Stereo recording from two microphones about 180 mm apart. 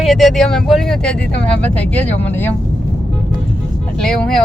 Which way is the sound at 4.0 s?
5° left (ahead or behind).